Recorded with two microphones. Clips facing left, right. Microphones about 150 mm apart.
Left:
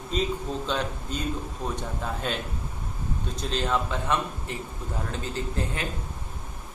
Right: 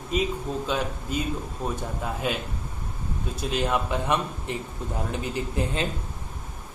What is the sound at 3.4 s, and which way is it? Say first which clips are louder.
Speech: right 2 dB; 10° right (ahead or behind).